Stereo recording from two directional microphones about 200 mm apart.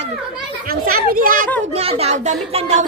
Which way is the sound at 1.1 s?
45° right (ahead or behind).